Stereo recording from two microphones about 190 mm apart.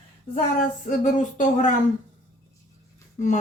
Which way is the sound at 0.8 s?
40° left (ahead or behind).